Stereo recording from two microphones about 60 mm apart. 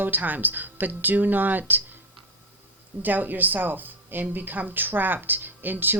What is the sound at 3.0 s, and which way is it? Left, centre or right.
Speech, right.